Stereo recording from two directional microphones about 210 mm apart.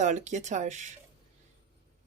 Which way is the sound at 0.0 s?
35° right (ahead or behind).